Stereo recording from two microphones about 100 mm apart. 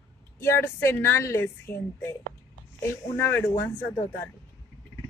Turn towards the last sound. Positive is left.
turn(degrees=25)  # may be behind; listen again after turning